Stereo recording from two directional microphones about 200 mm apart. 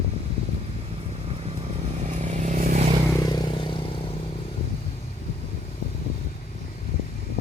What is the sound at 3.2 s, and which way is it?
Vehicle, 20° left (ahead or behind).